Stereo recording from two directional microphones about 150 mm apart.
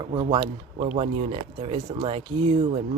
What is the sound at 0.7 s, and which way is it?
Speech, 45° right (ahead or behind).